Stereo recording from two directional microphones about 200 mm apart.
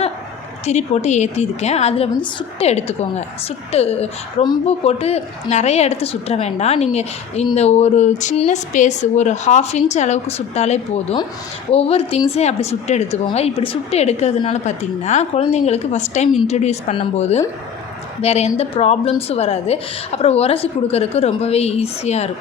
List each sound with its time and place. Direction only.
0.6 s a woman's voice: 35° left (ahead or behind)